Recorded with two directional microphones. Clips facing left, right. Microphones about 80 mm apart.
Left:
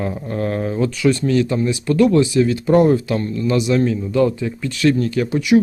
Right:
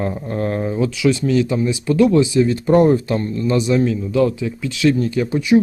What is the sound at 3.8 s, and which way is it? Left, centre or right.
Speech, centre.